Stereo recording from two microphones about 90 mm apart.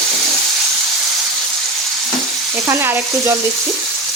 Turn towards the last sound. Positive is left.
turn(degrees=-25)  # may be behind; listen again after turning